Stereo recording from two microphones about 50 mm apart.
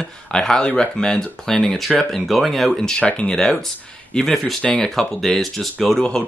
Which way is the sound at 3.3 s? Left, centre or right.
Centre.